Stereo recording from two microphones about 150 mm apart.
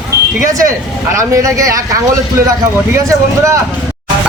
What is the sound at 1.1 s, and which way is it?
Speech, 20° right (ahead or behind).